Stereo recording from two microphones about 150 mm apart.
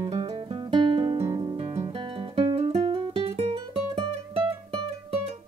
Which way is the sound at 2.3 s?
35° right (ahead or behind).